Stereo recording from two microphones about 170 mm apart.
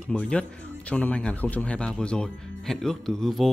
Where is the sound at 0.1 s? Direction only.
5° left (ahead or behind).